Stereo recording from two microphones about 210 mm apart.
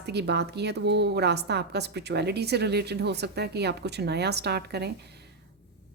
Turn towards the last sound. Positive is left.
turn(degrees=-50)  # may be behind; listen again after turning